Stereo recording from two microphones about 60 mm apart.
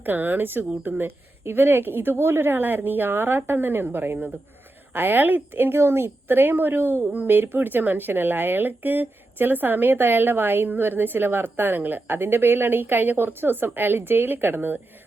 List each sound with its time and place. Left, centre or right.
0.0 s speech: right